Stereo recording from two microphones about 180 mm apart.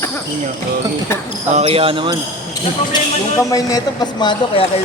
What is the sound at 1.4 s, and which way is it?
Speech, 35° right (ahead or behind).